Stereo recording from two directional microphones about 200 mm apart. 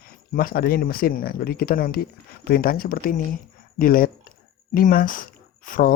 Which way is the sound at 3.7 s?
45° left (ahead or behind).